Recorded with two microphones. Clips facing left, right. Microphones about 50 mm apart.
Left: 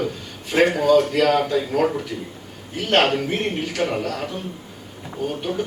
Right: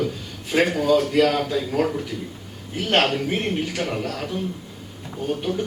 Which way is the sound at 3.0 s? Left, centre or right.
Centre.